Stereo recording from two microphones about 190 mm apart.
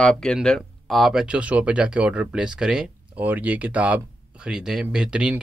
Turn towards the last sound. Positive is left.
turn(degrees=-5)  # may be behind; listen again after turning